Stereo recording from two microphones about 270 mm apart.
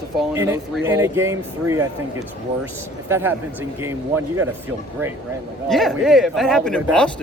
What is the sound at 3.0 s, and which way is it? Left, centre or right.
Speech, centre.